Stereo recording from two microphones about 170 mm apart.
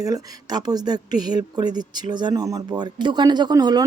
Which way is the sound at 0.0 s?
20° right (ahead or behind).